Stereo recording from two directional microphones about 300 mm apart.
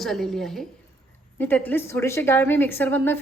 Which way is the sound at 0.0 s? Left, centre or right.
Centre.